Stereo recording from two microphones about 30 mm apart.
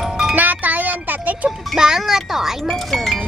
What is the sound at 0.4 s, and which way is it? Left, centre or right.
Music, right.